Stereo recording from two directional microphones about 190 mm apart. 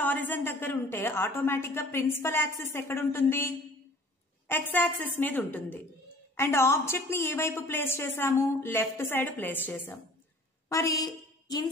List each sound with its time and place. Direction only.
0.0 s a woman's voice: 10° left (ahead or behind)